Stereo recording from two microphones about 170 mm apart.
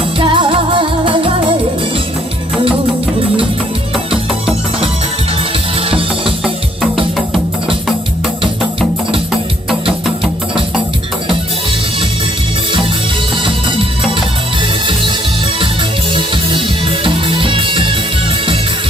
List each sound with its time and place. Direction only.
0.2 s music: 30° right (ahead or behind)
5.7 s music: 35° right (ahead or behind)
13.3 s music: 30° right (ahead or behind)
16.1 s music: 30° right (ahead or behind)